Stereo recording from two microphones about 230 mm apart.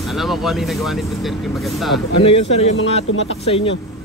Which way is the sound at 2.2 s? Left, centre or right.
Left.